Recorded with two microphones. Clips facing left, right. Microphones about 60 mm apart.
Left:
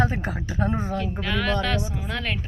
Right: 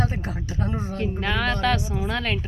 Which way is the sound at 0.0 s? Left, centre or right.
Left.